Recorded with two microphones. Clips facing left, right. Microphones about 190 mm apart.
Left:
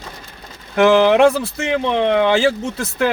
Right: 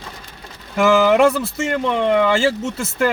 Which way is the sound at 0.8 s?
5° right (ahead or behind).